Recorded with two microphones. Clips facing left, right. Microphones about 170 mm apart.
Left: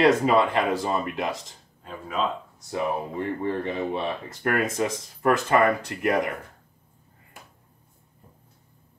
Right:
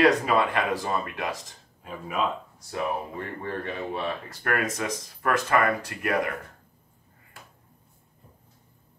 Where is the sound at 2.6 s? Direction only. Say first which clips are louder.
Left 2 dB; 20° left (ahead or behind).